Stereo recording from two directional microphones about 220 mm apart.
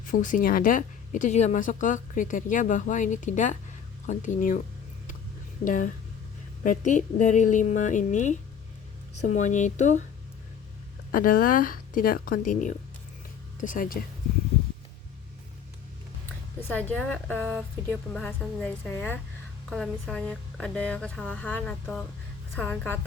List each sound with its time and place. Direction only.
0.0 s a woman's voice: 35° left (ahead or behind)
5.6 s a woman's voice: 35° left (ahead or behind)
11.1 s a woman's voice: 40° left (ahead or behind)
16.6 s a woman's voice: 10° left (ahead or behind)